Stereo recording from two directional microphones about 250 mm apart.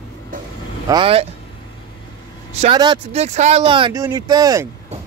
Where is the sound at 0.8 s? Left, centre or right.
Centre.